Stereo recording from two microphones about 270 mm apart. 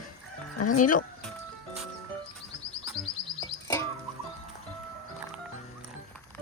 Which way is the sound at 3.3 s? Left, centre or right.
Centre.